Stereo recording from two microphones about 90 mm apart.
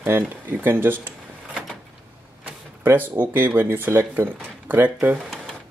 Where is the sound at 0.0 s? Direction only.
20° right (ahead or behind).